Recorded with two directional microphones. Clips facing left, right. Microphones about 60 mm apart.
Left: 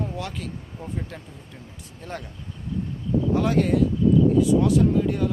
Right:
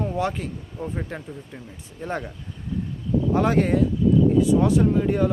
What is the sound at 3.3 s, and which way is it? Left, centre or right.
Speech, centre.